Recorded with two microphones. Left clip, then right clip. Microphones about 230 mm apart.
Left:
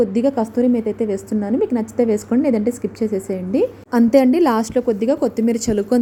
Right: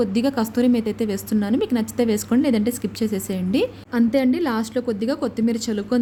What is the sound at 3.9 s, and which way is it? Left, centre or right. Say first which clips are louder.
Speech: left 7 dB; centre.